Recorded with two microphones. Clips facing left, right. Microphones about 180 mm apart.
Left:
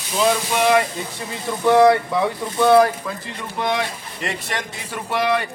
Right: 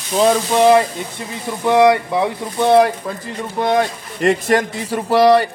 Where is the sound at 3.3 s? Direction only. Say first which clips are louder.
Right 7 dB; 40° right (ahead or behind).